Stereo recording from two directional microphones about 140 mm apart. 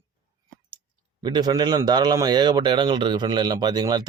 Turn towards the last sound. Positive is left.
turn(degrees=-30)  # may be behind; listen again after turning